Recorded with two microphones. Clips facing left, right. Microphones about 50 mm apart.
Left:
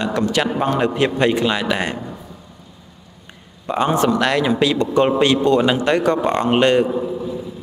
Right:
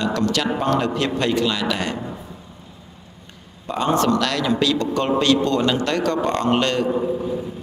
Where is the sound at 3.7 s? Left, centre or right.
Centre.